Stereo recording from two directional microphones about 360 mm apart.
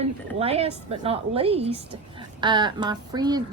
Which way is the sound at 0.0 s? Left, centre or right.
Centre.